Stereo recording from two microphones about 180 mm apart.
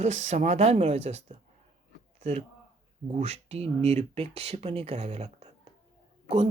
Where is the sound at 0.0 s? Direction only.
40° right (ahead or behind).